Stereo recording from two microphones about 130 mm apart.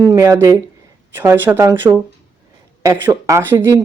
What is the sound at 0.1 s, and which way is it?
Speech, 20° right (ahead or behind).